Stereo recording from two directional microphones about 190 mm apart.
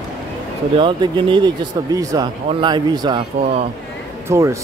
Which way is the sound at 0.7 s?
25° right (ahead or behind).